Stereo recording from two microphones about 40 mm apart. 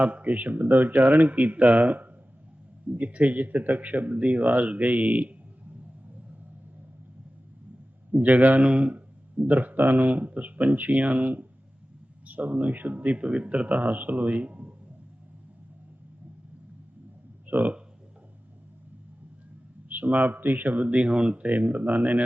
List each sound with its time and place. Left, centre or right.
0.0 s speech: right
3.4 s speech: right
8.1 s speech: right
17.5 s speech: right
19.9 s speech: right
21.4 s speech: right